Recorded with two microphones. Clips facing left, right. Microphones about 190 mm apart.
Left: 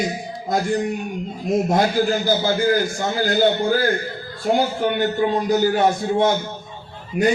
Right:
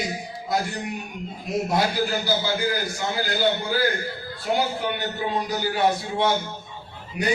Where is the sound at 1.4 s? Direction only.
45° left (ahead or behind).